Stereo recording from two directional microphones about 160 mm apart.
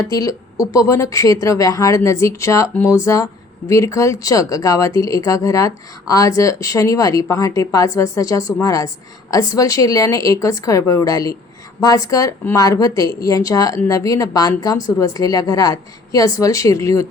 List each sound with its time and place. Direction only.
0.1 s speech: 20° left (ahead or behind)